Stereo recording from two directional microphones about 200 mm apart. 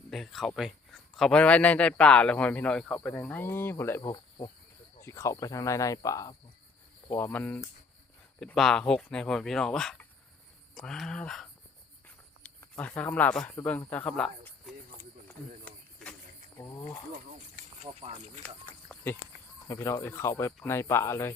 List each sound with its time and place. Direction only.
0.1 s speech: centre (ahead or behind)
4.1 s cricket: 20° left (ahead or behind)
4.9 s speech: 15° left (ahead or behind)
12.0 s a sound: 5° left (ahead or behind)
13.9 s speech: 5° left (ahead or behind)
16.6 s cricket: 20° left (ahead or behind)
17.6 s a sound: 30° right (ahead or behind)
18.4 s a sound: 10° left (ahead or behind)
19.6 s speech: 15° left (ahead or behind)